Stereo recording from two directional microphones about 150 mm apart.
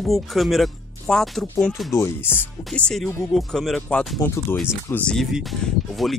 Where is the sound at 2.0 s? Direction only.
15° left (ahead or behind).